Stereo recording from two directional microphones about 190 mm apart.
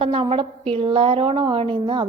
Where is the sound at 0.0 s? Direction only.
30° right (ahead or behind).